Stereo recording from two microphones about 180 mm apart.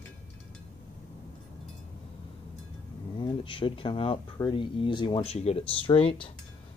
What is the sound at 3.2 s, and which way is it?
Speech, 30° left (ahead or behind).